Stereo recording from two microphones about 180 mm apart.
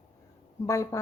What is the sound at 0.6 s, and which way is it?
Speech, 15° left (ahead or behind).